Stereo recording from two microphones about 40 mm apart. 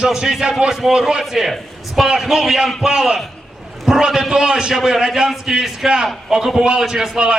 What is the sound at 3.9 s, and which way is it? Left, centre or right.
A man's voice, centre.